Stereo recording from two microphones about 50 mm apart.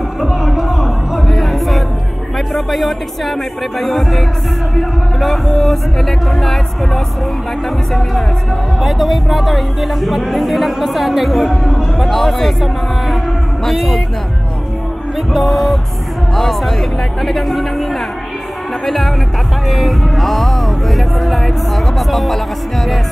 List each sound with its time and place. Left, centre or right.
0.2 s music: centre
2.3 s speech: centre
8.8 s speech: centre
13.7 s speech: centre
15.1 s speech: centre